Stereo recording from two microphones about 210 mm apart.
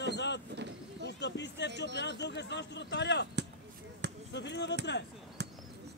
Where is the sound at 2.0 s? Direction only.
55° left (ahead or behind).